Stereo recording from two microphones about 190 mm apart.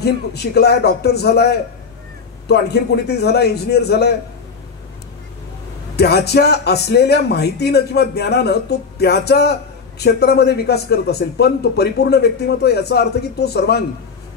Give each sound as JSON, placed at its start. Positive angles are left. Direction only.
{"t": 0.0, "sound": "speech", "side_deg": 60}
{"t": 5.9, "sound": "speech", "side_deg": 60}